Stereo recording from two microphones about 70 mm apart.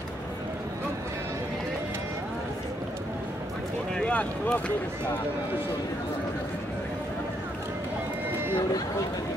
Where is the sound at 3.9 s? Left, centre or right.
Centre.